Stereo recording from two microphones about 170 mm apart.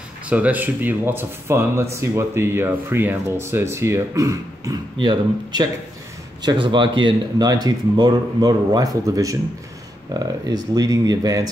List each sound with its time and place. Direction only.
0.3 s speech: 10° right (ahead or behind)
4.9 s speech: 30° right (ahead or behind)